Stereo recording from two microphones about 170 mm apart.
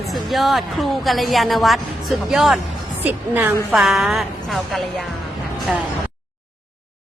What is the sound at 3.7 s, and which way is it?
Speech, centre (ahead or behind).